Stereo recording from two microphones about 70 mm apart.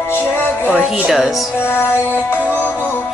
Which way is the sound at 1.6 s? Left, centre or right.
Left.